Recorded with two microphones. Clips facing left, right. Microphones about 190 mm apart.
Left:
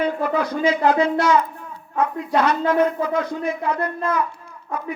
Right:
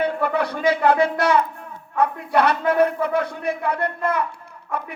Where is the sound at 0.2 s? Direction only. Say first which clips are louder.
Left 1 dB; 65° right (ahead or behind).